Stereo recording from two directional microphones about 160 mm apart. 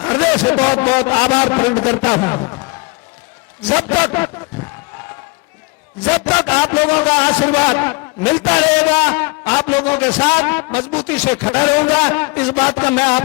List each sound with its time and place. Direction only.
0.1 s a man's voice: 10° left (ahead or behind)
3.6 s a man's voice: 10° left (ahead or behind)
6.1 s a man's voice: 10° left (ahead or behind)